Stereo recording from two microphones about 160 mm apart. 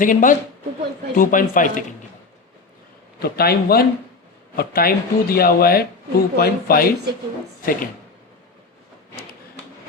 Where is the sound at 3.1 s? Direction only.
75° left (ahead or behind).